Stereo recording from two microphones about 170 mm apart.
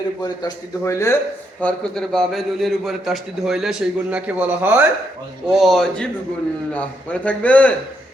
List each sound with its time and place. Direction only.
0.2 s a man's voice: 20° left (ahead or behind)
1.6 s a man's voice: 5° left (ahead or behind)
5.5 s a man's voice: centre (ahead or behind)